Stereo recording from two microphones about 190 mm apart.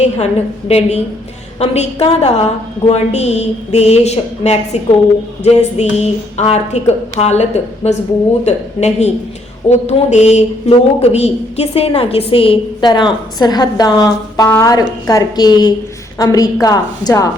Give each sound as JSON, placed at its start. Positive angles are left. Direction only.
{"t": 0.7, "sound": "a woman's voice", "side_deg": 35}